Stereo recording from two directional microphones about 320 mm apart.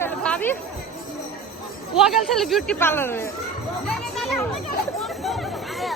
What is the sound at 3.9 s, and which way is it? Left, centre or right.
Children playing, centre.